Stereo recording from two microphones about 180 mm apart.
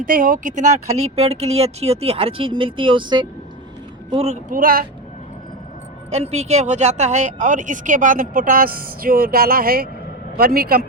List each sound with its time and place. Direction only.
0.0 s speech: 50° right (ahead or behind)
6.1 s speech: 35° right (ahead or behind); by 10.8 s 55° right (ahead or behind)